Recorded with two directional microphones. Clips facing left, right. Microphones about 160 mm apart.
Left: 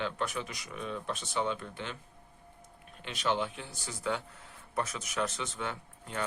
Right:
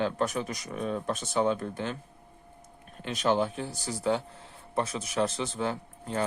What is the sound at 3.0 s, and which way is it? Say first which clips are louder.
Speech: right 6 dB; 45° right (ahead or behind).